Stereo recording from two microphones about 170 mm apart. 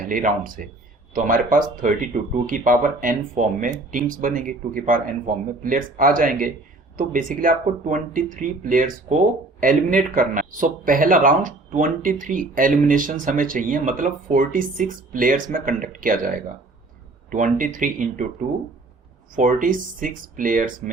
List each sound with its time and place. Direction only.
0.0 s speech: 55° right (ahead or behind)